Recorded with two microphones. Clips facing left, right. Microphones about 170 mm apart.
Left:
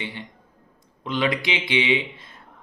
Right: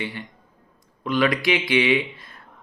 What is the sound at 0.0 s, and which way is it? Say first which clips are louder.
Speech: right 3 dB; 20° left (ahead or behind).